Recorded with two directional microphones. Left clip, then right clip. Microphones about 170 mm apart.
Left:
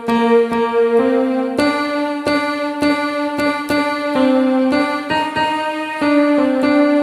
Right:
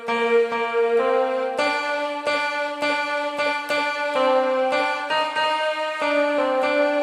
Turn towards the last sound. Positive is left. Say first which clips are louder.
# left 5 dB
turn(degrees=25)  # may be behind; listen again after turning